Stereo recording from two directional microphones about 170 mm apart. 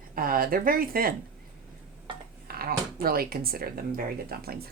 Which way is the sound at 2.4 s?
65° right (ahead or behind).